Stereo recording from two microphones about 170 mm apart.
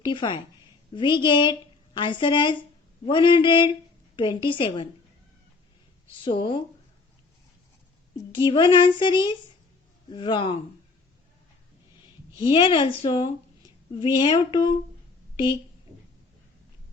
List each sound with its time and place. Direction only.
0.0 s a woman's voice: 30° left (ahead or behind)
6.2 s a woman's voice: 30° left (ahead or behind)
8.3 s a woman's voice: 25° left (ahead or behind)
12.5 s a woman's voice: 25° left (ahead or behind)